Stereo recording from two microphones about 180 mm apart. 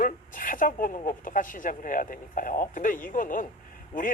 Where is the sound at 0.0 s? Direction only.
50° left (ahead or behind).